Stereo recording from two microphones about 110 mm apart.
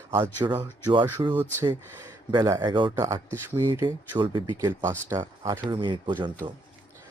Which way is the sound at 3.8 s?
45° right (ahead or behind).